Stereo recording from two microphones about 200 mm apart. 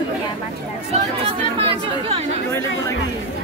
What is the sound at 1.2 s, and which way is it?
Chatter, 30° right (ahead or behind).